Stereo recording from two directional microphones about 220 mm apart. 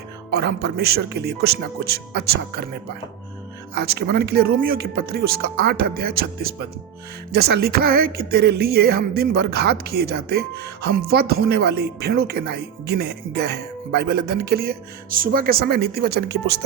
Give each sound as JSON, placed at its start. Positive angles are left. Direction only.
{"t": 0.3, "sound": "music", "side_deg": -45}
{"t": 3.8, "sound": "music", "side_deg": -45}